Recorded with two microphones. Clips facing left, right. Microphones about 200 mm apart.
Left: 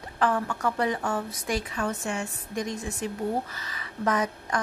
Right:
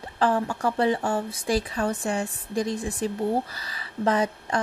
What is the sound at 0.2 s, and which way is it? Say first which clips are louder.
A woman's voice: right 3 dB; 30° right (ahead or behind).